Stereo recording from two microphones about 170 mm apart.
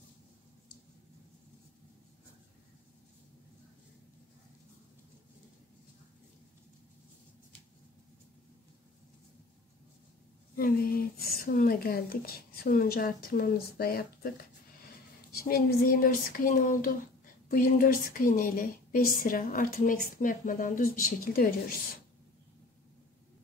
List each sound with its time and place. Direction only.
10.5 s speech: 60° left (ahead or behind)
15.3 s speech: 60° left (ahead or behind)